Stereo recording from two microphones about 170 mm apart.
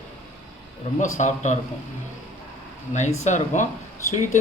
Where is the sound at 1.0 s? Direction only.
45° left (ahead or behind).